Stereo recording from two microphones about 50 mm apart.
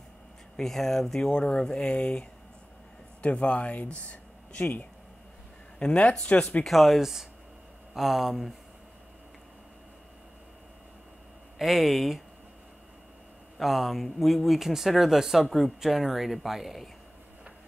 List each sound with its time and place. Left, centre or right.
0.6 s speech: centre; by 6.6 s left
6.6 s speech: centre
11.5 s speech: centre
13.6 s speech: centre